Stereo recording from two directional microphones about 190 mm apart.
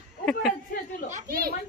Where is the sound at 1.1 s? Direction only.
45° right (ahead or behind).